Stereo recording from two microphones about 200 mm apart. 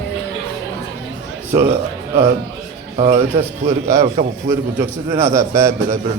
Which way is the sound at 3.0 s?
35° right (ahead or behind).